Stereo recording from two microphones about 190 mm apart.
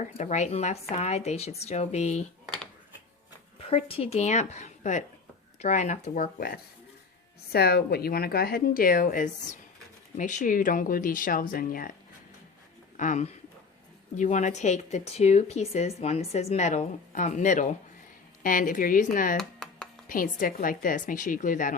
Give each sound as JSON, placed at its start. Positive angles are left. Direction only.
{"t": 0.2, "sound": "speech", "side_deg": 40}
{"t": 3.6, "sound": "speech", "side_deg": 30}
{"t": 7.5, "sound": "speech", "side_deg": 55}
{"t": 13.0, "sound": "speech", "side_deg": 40}
{"t": 19.4, "sound": "a sound", "side_deg": 0}
{"t": 20.1, "sound": "speech", "side_deg": 45}